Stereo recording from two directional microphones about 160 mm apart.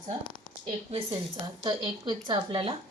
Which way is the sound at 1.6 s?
30° right (ahead or behind).